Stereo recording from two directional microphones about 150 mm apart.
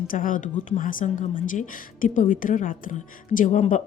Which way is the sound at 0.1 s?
65° left (ahead or behind).